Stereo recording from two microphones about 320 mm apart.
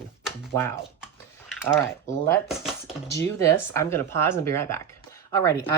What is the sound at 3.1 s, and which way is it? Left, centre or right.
Speech, centre.